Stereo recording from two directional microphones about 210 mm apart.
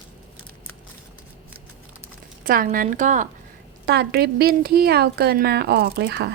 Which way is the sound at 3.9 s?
50° right (ahead or behind).